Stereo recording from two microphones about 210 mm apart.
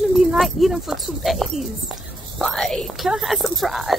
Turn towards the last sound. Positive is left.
turn(degrees=0)  # may be behind; listen again after turning